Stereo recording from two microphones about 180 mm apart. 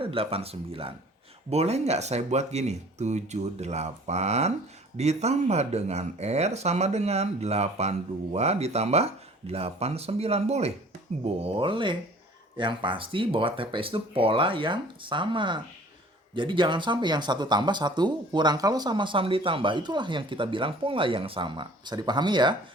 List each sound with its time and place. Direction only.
0.0 s speech: 30° right (ahead or behind)